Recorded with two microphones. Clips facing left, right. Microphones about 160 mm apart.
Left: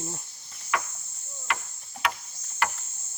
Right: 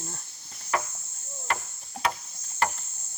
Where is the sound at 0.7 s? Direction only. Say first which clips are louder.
Right 1 dB; 35° right (ahead or behind).